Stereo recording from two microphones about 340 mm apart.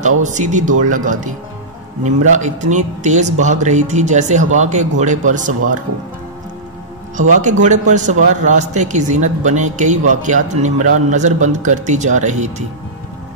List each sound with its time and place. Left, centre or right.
0.0 s a man's voice: right
2.3 s a man's voice: right
7.2 s a man's voice: right